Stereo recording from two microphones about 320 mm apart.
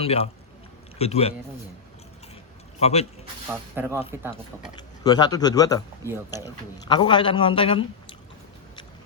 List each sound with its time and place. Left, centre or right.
0.0 s speech: centre
2.7 s a man's voice: centre
3.5 s speech: centre
5.0 s speech: centre